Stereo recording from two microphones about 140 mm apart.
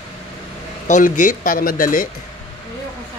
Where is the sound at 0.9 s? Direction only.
65° left (ahead or behind).